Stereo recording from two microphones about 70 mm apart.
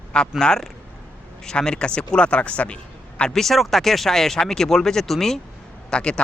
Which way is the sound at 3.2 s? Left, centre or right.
Centre.